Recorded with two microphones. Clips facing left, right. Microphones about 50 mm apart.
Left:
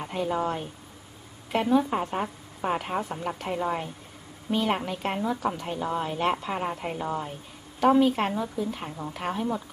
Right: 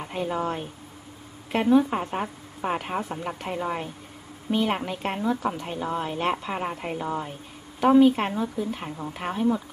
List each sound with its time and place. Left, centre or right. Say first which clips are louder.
0.0 s speech: even; centre
1.6 s a woman's voice: right 4 dB; centre